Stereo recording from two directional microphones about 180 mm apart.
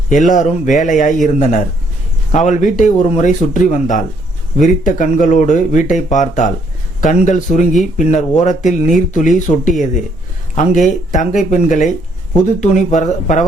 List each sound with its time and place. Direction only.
0.1 s speech: 45° left (ahead or behind)